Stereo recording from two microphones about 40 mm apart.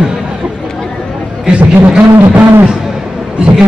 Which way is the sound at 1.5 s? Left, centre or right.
Right.